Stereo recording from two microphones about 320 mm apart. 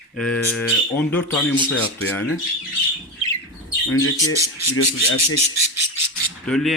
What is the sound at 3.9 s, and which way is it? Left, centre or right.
Speech, left.